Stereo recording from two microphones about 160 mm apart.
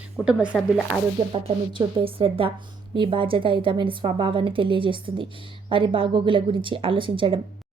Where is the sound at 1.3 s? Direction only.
30° right (ahead or behind).